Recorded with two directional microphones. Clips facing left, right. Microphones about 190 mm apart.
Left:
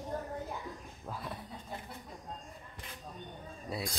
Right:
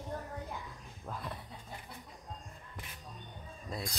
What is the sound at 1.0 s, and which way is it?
Speech, 5° left (ahead or behind).